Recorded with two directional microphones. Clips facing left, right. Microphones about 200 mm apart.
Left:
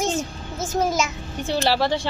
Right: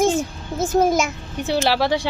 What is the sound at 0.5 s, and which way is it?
Speech, 55° right (ahead or behind).